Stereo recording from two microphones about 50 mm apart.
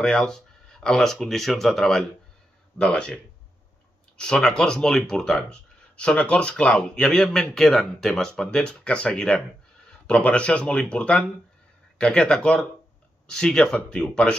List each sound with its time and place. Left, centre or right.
0.0 s speech: centre
2.8 s speech: centre
4.2 s speech: centre